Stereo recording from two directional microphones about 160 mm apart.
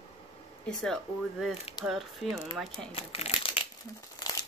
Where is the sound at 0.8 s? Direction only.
Centre (ahead or behind).